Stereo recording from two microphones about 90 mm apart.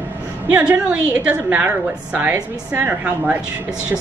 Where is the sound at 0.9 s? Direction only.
15° right (ahead or behind).